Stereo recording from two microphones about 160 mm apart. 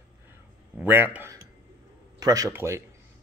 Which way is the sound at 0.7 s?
15° right (ahead or behind).